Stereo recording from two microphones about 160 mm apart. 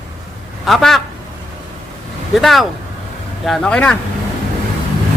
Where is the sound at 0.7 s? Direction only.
Centre (ahead or behind).